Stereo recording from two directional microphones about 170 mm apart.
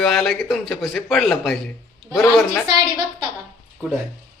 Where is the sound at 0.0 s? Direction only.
Centre (ahead or behind).